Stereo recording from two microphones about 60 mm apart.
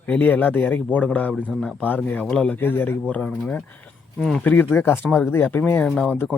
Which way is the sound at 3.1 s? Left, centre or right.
Left.